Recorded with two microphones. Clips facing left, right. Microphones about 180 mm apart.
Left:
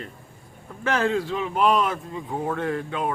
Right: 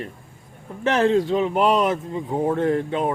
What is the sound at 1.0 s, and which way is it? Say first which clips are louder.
Speech: right 6 dB; 30° right (ahead or behind).